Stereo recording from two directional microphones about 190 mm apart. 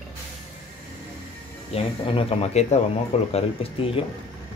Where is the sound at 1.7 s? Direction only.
30° left (ahead or behind).